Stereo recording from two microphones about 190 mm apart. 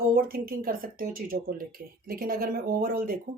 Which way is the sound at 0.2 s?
50° right (ahead or behind).